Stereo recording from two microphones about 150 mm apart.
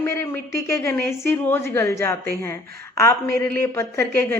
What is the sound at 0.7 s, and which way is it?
A woman's voice, 20° left (ahead or behind).